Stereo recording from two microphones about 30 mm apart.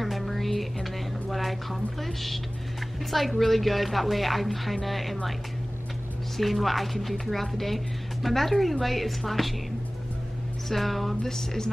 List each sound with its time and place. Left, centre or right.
0.0 s music: centre
1.3 s a woman's voice: centre
6.3 s speech: centre
10.7 s speech: centre
11.2 s a sound: centre